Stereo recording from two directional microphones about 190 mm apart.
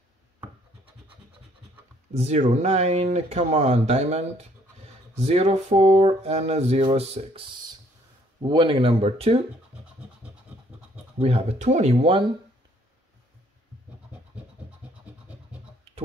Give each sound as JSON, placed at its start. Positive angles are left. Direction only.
{"t": 2.1, "sound": "speech", "side_deg": -35}
{"t": 11.1, "sound": "speech", "side_deg": -30}